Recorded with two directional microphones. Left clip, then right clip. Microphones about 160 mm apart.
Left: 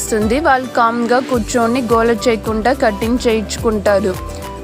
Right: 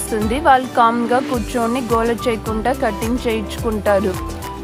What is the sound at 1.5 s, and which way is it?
Speech, 20° left (ahead or behind).